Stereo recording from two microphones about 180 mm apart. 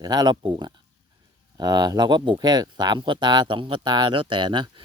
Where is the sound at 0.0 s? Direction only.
25° right (ahead or behind).